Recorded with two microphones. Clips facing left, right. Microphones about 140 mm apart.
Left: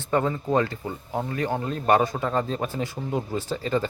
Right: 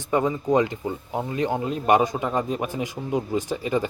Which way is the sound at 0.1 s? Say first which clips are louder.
Right 2 dB; 15° right (ahead or behind).